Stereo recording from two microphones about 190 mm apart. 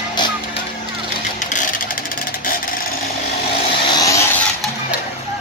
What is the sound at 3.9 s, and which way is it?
Vehicle, 20° left (ahead or behind).